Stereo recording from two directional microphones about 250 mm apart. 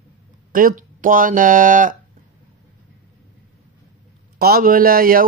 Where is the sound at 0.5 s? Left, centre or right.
Right.